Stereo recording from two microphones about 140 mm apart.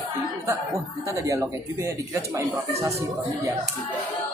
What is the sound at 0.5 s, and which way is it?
Speech, 20° right (ahead or behind).